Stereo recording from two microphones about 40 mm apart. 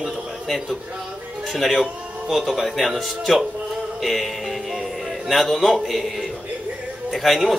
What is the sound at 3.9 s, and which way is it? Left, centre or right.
Music, centre.